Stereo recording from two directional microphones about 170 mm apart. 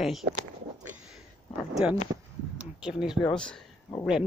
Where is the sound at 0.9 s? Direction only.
5° right (ahead or behind).